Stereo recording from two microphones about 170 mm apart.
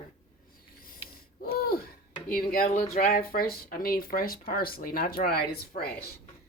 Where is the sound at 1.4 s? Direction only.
60° left (ahead or behind).